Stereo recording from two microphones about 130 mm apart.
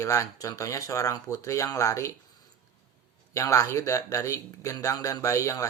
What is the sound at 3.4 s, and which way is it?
Speech, 25° left (ahead or behind).